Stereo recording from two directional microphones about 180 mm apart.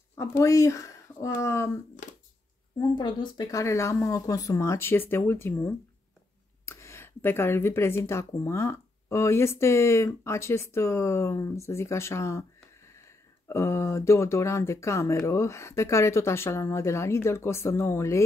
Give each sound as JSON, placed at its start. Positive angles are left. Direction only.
{"t": 0.4, "sound": "speech", "side_deg": 15}
{"t": 3.0, "sound": "speech", "side_deg": 25}